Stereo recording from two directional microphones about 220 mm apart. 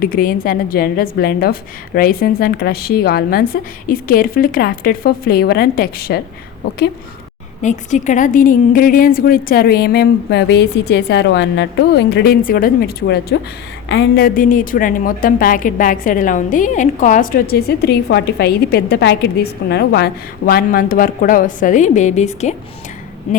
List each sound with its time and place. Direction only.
0.0 s a woman's voice: 40° left (ahead or behind)
7.6 s a woman's voice: 35° left (ahead or behind)